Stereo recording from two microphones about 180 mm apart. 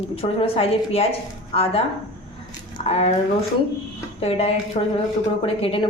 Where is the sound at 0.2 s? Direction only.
30° left (ahead or behind).